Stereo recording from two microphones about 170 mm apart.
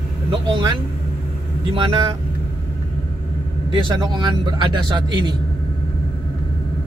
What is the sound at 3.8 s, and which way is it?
A man's voice, 25° right (ahead or behind).